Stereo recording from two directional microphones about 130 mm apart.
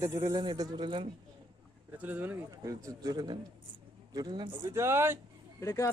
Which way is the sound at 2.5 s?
25° right (ahead or behind).